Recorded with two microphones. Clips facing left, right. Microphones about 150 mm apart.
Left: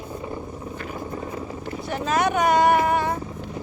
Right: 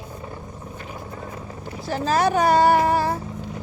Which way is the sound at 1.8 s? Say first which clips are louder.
Right 2 dB; 35° right (ahead or behind).